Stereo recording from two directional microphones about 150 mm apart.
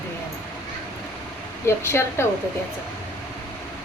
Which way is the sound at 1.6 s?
15° left (ahead or behind).